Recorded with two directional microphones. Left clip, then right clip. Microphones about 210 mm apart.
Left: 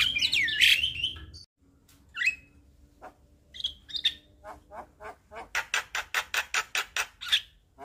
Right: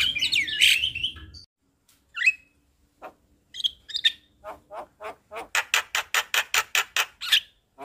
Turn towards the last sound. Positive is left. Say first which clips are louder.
# right 5 dB
turn(degrees=-25)  # may be behind; listen again after turning